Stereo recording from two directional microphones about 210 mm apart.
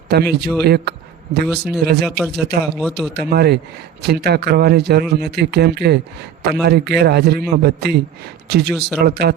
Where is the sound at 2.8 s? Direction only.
Centre (ahead or behind).